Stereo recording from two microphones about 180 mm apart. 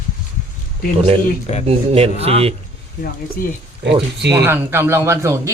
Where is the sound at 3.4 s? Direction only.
55° left (ahead or behind).